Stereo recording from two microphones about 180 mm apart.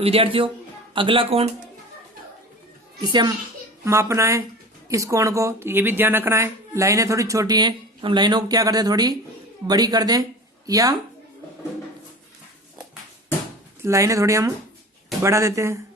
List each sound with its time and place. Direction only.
0.0 s a man's voice: 30° right (ahead or behind)
3.0 s a woman's voice: 25° right (ahead or behind)
13.8 s a woman's voice: 15° right (ahead or behind)